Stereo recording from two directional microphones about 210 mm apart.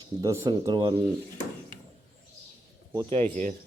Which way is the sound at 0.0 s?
15° right (ahead or behind).